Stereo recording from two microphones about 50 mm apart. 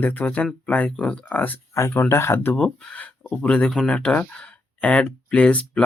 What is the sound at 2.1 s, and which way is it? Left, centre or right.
Speech, left.